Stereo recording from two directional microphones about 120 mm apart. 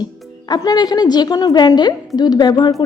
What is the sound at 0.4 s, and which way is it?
A woman's voice, 35° left (ahead or behind).